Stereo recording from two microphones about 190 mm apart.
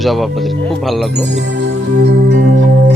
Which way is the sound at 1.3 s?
65° right (ahead or behind).